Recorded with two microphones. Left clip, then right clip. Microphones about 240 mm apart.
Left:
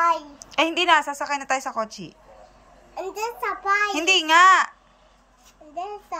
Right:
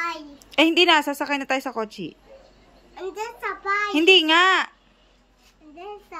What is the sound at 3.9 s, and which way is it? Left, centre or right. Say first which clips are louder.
Speech: right 5 dB; centre.